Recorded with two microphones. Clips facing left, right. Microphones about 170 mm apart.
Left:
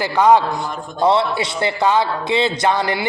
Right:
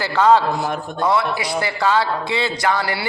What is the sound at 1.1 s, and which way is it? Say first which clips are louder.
A man's voice: left 3 dB; 25° left (ahead or behind).